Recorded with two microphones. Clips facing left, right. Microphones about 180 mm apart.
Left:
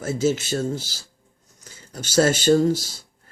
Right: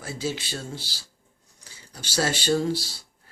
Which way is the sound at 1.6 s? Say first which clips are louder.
Left 7 dB; 50° left (ahead or behind).